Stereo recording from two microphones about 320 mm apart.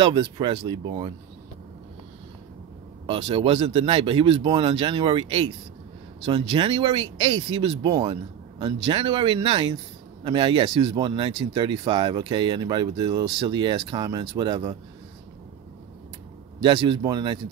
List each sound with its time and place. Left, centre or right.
0.0 s speech: centre
3.1 s speech: centre
16.6 s speech: centre